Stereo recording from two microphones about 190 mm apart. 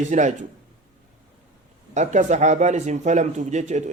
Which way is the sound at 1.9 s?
40° right (ahead or behind).